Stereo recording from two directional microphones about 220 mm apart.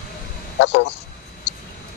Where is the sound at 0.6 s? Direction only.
50° left (ahead or behind).